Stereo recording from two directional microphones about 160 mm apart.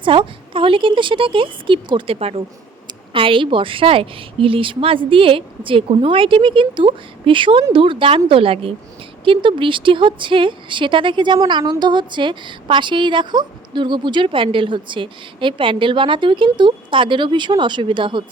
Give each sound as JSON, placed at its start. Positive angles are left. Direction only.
{"t": 0.0, "sound": "a woman's voice", "side_deg": -30}